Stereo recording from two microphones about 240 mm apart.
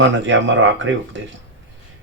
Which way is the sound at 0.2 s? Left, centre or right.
Right.